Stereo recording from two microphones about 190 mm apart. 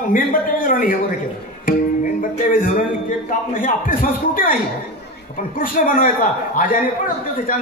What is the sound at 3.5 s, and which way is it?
Speech, 45° left (ahead or behind).